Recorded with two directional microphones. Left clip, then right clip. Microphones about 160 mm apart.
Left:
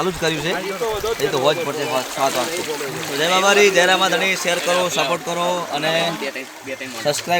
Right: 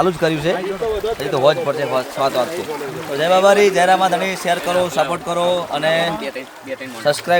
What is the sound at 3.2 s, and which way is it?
A man's voice, 90° right.